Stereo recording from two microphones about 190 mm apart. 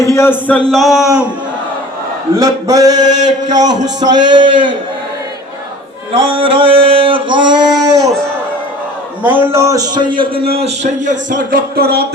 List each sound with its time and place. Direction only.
0.0 s a man's voice: 15° left (ahead or behind); by 1.2 s centre (ahead or behind)
2.3 s a man's voice: 20° right (ahead or behind)
6.3 s a man's voice: 30° right (ahead or behind)
9.2 s a man's voice: 10° right (ahead or behind); by 12.0 s 55° right (ahead or behind)